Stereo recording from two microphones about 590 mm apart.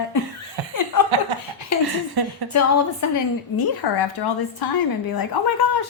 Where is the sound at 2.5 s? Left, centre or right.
Left.